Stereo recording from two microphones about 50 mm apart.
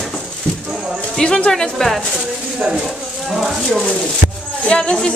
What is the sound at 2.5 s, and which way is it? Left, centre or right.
Speech, centre.